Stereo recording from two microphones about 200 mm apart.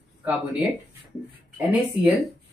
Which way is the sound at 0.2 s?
5° right (ahead or behind).